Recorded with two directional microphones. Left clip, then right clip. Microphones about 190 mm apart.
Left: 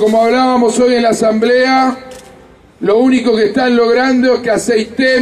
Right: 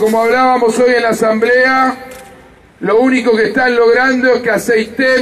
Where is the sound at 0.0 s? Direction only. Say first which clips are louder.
Even; 40° left (ahead or behind).